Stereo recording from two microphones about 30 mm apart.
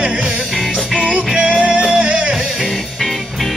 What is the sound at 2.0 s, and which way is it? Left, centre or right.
Music, right.